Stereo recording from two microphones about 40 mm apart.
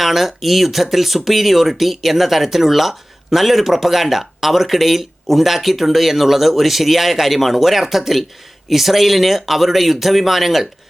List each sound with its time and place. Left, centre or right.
0.0 s speech: centre